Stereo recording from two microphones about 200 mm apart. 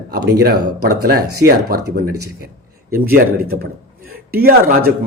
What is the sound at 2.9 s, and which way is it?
Speech, 50° right (ahead or behind).